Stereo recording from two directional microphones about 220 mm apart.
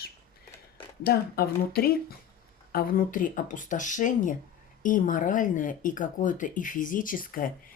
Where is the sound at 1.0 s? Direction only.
45° left (ahead or behind).